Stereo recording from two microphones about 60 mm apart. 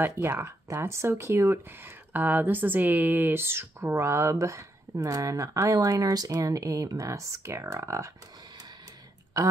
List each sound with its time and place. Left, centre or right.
0.0 s speech: right
2.1 s speech: right
5.3 s speech: right